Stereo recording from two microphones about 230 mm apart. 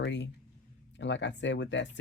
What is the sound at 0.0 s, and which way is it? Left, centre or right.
Speech, left.